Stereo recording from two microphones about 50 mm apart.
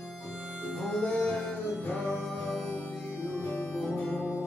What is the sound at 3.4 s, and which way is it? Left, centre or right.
Music, left.